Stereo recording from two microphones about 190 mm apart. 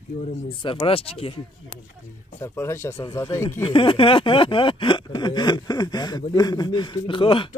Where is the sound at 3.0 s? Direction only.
25° left (ahead or behind).